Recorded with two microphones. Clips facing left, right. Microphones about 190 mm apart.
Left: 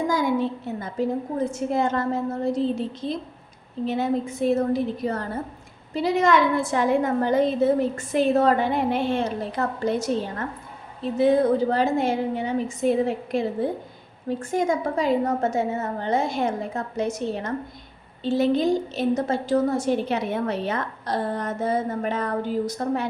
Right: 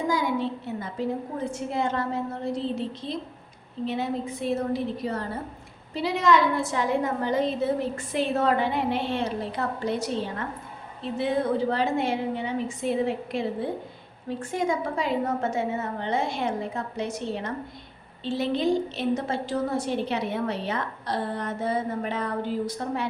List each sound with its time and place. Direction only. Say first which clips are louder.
0.1 s a woman's voice: left 3 dB; 45° left (ahead or behind)